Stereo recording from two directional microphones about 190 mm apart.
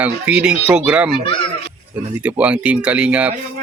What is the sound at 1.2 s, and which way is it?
Speech, 25° left (ahead or behind).